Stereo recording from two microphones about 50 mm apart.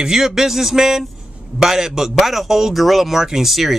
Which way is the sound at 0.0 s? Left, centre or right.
Centre.